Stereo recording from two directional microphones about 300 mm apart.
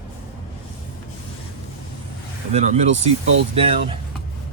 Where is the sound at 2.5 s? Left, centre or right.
Right.